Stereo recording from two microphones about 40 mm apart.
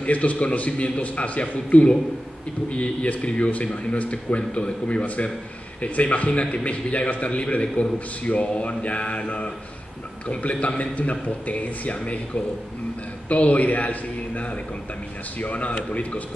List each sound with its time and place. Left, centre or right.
0.0 s a man's voice: left
10.2 s a man's voice: left
13.3 s a man's voice: left